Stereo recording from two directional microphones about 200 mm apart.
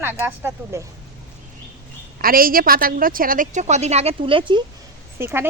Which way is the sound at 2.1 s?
45° right (ahead or behind).